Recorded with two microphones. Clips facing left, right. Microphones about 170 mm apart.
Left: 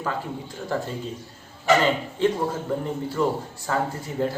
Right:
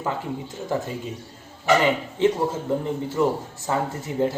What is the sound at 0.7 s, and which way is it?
A man's voice, 15° right (ahead or behind).